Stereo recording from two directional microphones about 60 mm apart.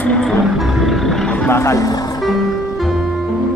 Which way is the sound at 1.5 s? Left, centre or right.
Left.